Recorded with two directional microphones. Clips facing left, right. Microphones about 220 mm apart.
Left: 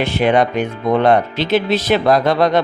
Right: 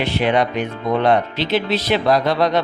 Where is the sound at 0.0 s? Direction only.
45° left (ahead or behind).